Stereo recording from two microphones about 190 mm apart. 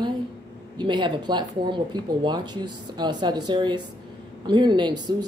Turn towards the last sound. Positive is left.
turn(degrees=-20)  # may be behind; listen again after turning